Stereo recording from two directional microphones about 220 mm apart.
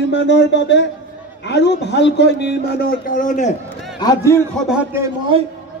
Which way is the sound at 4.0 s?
15° left (ahead or behind).